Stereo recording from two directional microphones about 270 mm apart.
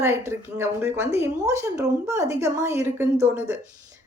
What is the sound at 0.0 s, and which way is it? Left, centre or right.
A woman's voice, centre.